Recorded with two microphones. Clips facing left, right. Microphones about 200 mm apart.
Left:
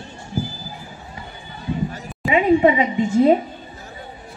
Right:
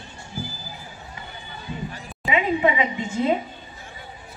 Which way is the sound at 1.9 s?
40° left (ahead or behind).